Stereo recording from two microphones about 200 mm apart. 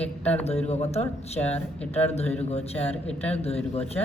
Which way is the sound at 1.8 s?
10° left (ahead or behind).